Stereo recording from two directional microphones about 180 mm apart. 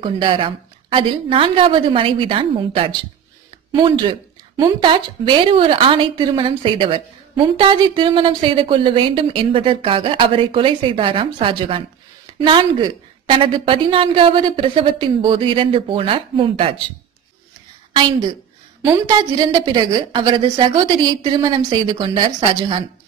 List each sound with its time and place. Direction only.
0.0 s speech: 30° right (ahead or behind)
18.9 s speech: 20° right (ahead or behind)